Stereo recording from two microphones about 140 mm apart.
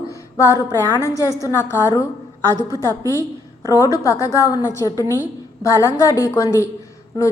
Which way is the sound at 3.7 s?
20° left (ahead or behind).